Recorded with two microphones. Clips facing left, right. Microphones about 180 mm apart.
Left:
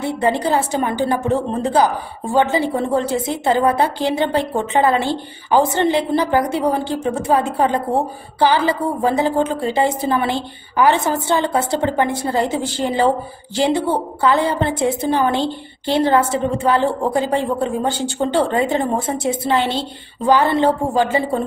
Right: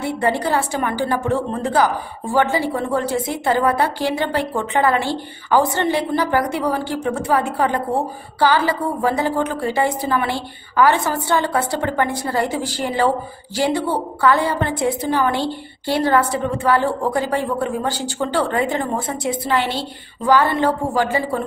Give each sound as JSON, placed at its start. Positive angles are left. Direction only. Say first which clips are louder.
{"t": 0.0, "sound": "a woman's voice", "louder": "left 2 dB", "side_deg": 20}